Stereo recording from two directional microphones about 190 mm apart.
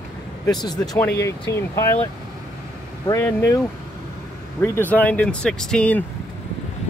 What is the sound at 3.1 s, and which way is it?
Speech, 15° left (ahead or behind).